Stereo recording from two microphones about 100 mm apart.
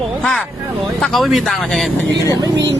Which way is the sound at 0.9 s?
5° left (ahead or behind).